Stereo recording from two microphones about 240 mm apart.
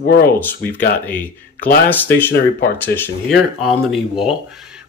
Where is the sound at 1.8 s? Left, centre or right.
Centre.